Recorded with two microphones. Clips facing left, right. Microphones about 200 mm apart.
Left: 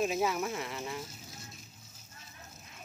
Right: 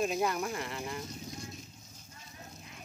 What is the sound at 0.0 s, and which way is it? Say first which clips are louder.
Speech: even; 5° left (ahead or behind).